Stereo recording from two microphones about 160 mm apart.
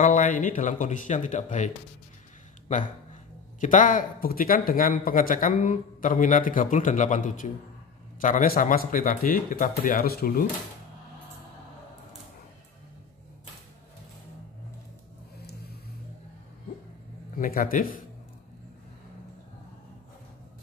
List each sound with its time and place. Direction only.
0.0 s a sound: 50° left (ahead or behind)
0.4 s speech: 50° left (ahead or behind)
3.6 s speech: 55° left (ahead or behind)
15.3 s vehicle: 80° left
17.4 s speech: 60° left (ahead or behind)